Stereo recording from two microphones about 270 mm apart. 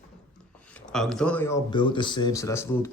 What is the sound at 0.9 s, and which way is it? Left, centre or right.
Speech, centre.